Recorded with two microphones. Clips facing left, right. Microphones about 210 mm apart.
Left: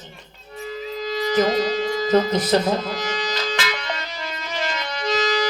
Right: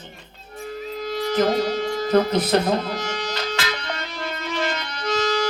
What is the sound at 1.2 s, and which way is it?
Music, 55° right (ahead or behind).